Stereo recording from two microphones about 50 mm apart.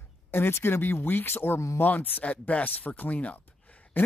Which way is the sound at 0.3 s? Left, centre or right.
Left.